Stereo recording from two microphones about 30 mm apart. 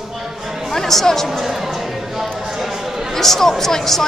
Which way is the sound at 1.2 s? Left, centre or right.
Centre.